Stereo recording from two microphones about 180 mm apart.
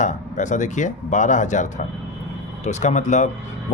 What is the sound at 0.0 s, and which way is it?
A man's voice, 40° left (ahead or behind).